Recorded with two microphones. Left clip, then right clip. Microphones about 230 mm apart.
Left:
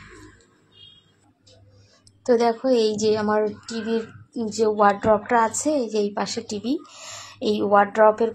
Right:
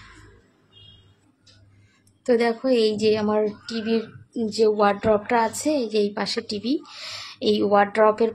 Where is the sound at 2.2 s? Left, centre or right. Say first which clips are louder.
Left 1 dB; centre.